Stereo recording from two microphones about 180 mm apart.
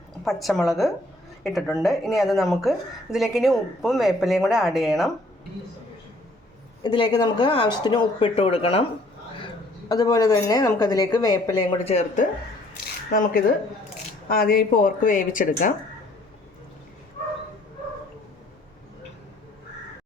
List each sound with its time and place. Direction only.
0.3 s speech: centre (ahead or behind)
6.8 s speech: 25° left (ahead or behind)
9.9 s speech: 20° left (ahead or behind)
11.9 s speech: 40° left (ahead or behind)
14.3 s speech: 55° left (ahead or behind)